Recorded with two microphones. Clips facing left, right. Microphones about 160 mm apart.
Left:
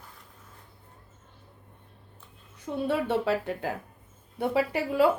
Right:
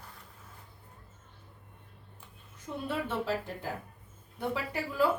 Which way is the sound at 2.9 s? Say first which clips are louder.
Left 6 dB; 70° left (ahead or behind).